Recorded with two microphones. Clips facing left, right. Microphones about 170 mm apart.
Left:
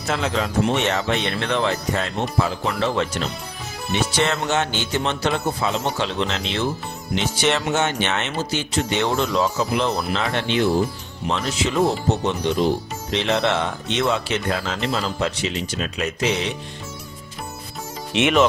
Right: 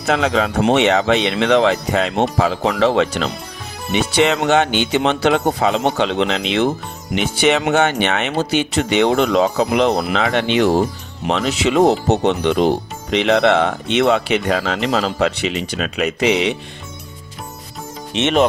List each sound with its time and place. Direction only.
0.0 s speech: 75° right (ahead or behind)
3.9 s speech: 65° right (ahead or behind)
18.1 s speech: 15° left (ahead or behind)